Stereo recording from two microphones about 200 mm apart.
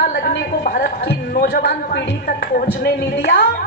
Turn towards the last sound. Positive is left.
turn(degrees=55)  # may be behind; listen again after turning